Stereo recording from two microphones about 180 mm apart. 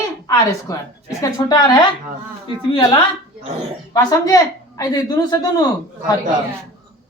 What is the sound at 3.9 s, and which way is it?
A woman's voice, 20° left (ahead or behind).